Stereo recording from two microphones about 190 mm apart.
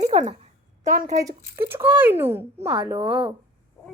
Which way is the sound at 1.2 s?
10° right (ahead or behind).